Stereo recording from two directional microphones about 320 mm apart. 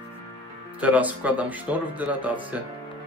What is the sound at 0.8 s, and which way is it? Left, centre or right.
Speech, centre.